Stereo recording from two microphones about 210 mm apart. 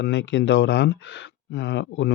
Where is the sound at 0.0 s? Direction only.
60° left (ahead or behind).